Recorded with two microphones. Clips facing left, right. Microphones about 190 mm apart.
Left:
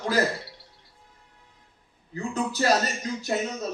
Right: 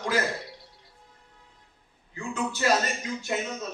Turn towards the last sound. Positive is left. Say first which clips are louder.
# left 3 dB
turn(degrees=35)  # may be behind; listen again after turning